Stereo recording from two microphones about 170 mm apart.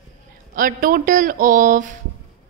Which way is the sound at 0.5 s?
55° right (ahead or behind).